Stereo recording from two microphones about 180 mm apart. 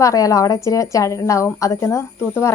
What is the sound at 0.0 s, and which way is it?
Speech, 20° left (ahead or behind).